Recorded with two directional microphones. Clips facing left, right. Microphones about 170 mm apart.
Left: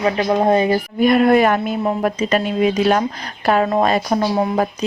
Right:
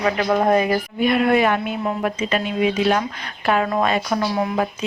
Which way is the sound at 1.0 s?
45° left (ahead or behind).